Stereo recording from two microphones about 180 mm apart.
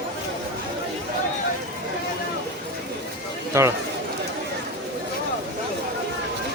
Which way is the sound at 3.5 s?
15° right (ahead or behind).